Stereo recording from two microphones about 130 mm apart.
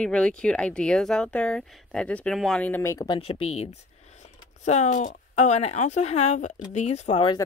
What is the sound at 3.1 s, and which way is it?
Speech, 45° left (ahead or behind).